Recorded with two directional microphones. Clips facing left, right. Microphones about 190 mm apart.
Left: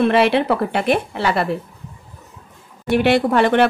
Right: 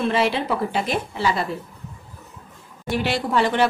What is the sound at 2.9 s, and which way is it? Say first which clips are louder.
Speech: left 7 dB; 60° left (ahead or behind).